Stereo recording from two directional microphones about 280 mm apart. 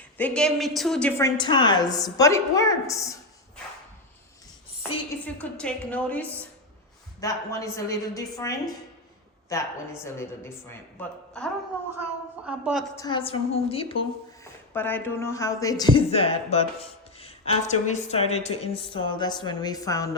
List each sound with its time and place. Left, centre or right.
0.2 s a woman's voice: centre
1.4 s speech: centre
5.2 s a woman's voice: centre
12.5 s a woman's voice: centre
13.0 s a woman's voice: centre
14.4 s a woman's voice: centre